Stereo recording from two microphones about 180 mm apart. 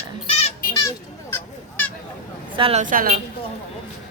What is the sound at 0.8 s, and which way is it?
Children playing, 20° left (ahead or behind).